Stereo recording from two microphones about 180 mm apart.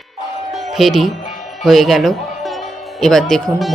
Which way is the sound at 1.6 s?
Centre (ahead or behind).